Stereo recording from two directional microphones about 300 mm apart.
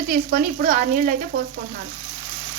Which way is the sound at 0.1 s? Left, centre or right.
Right.